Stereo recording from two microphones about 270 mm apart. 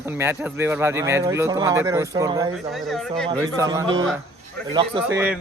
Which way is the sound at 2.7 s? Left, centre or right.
Centre.